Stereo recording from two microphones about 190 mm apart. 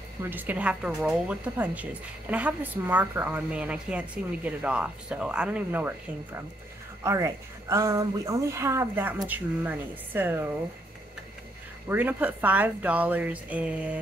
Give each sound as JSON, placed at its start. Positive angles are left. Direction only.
{"t": 0.2, "sound": "a woman's voice", "side_deg": -10}
{"t": 7.0, "sound": "a woman's voice", "side_deg": -15}
{"t": 11.9, "sound": "a woman's voice", "side_deg": -10}